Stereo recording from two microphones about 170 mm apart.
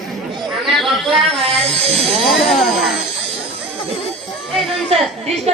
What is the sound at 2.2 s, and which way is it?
Speech, centre (ahead or behind).